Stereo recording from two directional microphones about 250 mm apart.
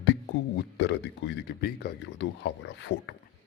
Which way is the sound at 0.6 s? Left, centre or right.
Left.